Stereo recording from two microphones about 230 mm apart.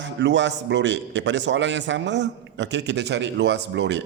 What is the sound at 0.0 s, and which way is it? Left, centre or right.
A man's voice, right.